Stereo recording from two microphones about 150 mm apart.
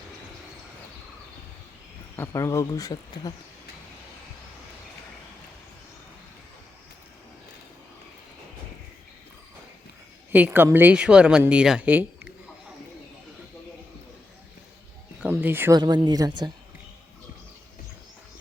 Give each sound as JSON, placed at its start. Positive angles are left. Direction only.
{"t": 2.1, "sound": "speech", "side_deg": 15}
{"t": 10.3, "sound": "speech", "side_deg": -10}
{"t": 15.2, "sound": "a sound", "side_deg": -10}
{"t": 15.8, "sound": "a woman's voice", "side_deg": -30}